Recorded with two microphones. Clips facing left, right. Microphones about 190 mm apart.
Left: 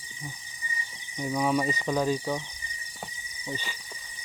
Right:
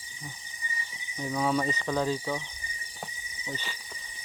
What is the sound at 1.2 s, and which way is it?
Speech, 10° left (ahead or behind).